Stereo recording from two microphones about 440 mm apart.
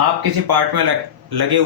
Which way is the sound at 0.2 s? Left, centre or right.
Right.